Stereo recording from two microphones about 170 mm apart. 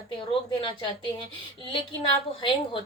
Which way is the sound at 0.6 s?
30° left (ahead or behind).